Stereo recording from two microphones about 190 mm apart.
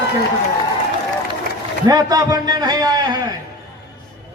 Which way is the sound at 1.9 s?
20° right (ahead or behind).